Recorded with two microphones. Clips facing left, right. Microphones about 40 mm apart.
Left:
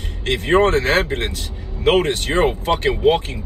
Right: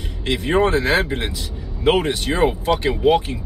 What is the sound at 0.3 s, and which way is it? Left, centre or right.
Speech, left.